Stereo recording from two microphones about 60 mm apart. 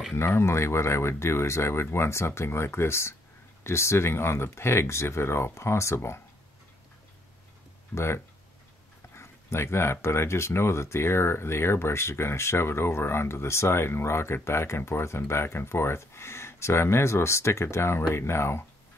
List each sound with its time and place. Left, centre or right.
0.1 s speech: left
7.9 s speech: left